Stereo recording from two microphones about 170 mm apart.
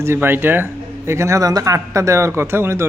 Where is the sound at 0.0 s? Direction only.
15° right (ahead or behind).